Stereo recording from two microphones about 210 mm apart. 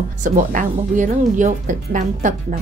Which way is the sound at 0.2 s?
40° right (ahead or behind).